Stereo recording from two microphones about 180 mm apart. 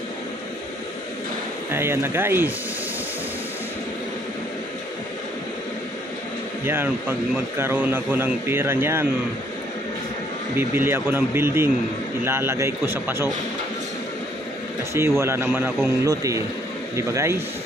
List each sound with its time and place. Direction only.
1.7 s a man's voice: 15° right (ahead or behind)
6.6 s a man's voice: 10° right (ahead or behind)
10.7 s a man's voice: 10° right (ahead or behind)
15.0 s a man's voice: 15° right (ahead or behind)